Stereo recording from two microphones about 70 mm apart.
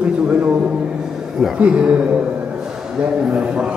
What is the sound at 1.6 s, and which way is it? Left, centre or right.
Speech, centre.